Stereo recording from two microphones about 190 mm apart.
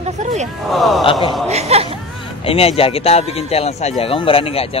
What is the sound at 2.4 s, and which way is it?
Speech, 30° left (ahead or behind).